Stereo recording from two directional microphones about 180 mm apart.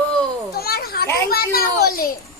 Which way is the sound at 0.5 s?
60° left (ahead or behind).